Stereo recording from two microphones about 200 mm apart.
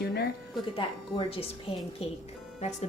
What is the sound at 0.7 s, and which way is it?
Speech, 25° left (ahead or behind).